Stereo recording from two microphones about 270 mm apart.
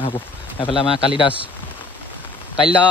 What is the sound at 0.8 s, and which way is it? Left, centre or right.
Speech, centre.